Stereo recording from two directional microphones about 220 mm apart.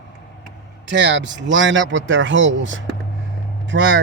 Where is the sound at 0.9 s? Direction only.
55° right (ahead or behind).